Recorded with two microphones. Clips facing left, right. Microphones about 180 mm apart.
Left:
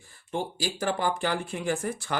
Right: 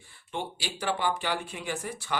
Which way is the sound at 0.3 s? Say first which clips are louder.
Left 4 dB; 40° left (ahead or behind).